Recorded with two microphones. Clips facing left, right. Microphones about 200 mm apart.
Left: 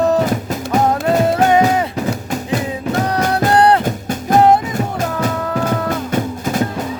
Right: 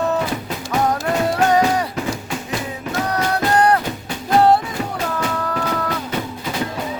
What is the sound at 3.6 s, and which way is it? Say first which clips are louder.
Music: left 4 dB; 30° left (ahead or behind).